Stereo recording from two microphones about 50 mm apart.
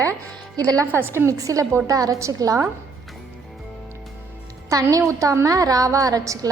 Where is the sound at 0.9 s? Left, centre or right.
Right.